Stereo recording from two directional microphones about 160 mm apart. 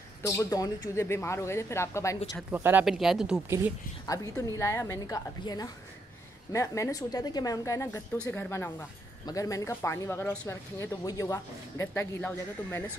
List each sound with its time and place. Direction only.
0.2 s speech: 20° left (ahead or behind)
2.5 s speech: 10° right (ahead or behind)
3.4 s speech: 15° right (ahead or behind)
4.0 s a woman's voice: 20° left (ahead or behind)